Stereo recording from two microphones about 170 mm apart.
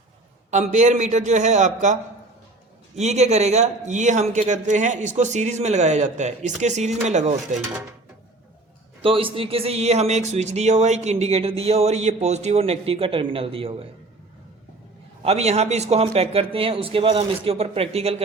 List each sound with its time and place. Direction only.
0.5 s a man's voice: 45° right (ahead or behind)
9.0 s speech: 30° right (ahead or behind)
15.2 s speech: 40° right (ahead or behind)